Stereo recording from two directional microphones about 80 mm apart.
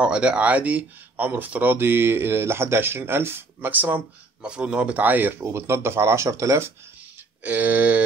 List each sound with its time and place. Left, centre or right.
0.0 s speech: centre; by 6.7 s right
7.4 s speech: centre